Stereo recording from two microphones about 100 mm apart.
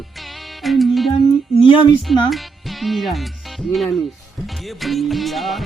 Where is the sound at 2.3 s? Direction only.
Centre (ahead or behind).